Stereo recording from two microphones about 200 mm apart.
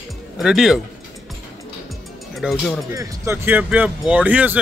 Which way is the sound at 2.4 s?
5° right (ahead or behind).